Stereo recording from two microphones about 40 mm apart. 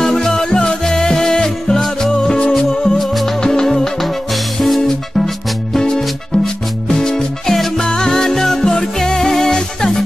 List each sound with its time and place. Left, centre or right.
0.0 s music: centre
3.0 s music: centre
3.3 s music: centre
7.8 s music: centre